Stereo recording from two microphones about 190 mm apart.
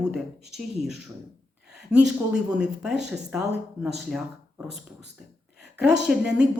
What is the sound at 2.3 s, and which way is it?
A woman's voice, 5° right (ahead or behind).